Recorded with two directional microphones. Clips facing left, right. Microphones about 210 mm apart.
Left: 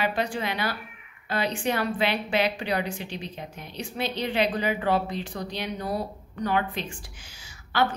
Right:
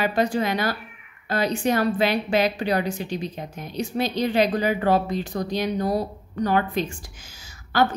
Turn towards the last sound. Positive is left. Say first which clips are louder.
# right 4 dB
turn(degrees=-40)  # may be behind; listen again after turning